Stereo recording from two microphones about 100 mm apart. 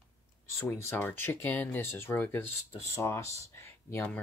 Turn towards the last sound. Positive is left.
turn(degrees=15)  # may be behind; listen again after turning